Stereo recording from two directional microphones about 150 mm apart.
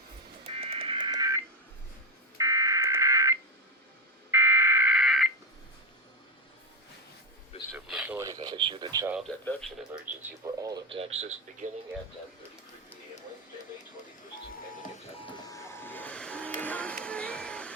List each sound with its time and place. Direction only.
0.4 s music: 40° right (ahead or behind); by 1.4 s 25° right (ahead or behind)
2.4 s fire alarm: 20° right (ahead or behind); by 5.3 s centre (ahead or behind)
7.9 s radio: 10° right (ahead or behind)
8.2 s speech: 30° right (ahead or behind)
9.2 s a man's voice: 10° left (ahead or behind)
10.4 s speech: 25° right (ahead or behind)
10.8 s speech: 40° right (ahead or behind)
15.1 s music: 35° left (ahead or behind); by 17.7 s 5° left (ahead or behind)